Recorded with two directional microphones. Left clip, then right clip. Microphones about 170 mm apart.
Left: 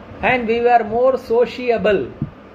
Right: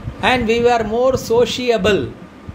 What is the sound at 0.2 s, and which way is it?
A man's voice, 45° right (ahead or behind).